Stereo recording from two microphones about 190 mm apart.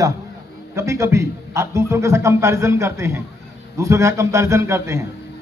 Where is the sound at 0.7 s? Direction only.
15° right (ahead or behind).